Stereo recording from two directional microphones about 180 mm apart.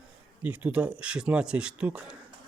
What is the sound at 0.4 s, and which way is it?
Speech, 10° right (ahead or behind).